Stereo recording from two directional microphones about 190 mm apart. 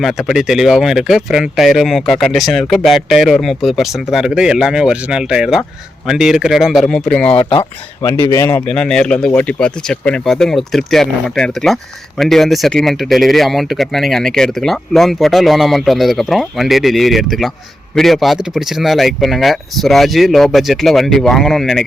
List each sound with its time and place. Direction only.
0.0 s speech: centre (ahead or behind)
7.3 s speech: 30° left (ahead or behind)
8.3 s speech: 15° left (ahead or behind)